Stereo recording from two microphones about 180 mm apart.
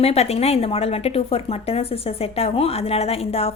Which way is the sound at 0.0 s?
35° left (ahead or behind).